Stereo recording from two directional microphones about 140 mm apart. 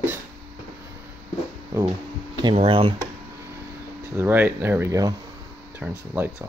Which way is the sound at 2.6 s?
40° right (ahead or behind).